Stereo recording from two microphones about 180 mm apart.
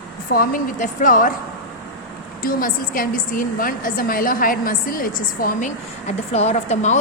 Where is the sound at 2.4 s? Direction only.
50° left (ahead or behind).